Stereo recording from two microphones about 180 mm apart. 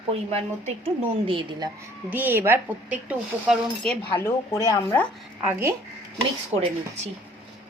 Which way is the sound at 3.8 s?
15° left (ahead or behind).